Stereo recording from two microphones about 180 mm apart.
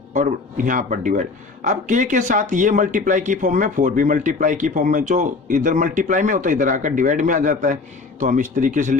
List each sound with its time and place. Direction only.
0.1 s speech: 45° right (ahead or behind)